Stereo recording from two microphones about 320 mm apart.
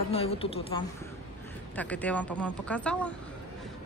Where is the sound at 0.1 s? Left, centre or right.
Centre.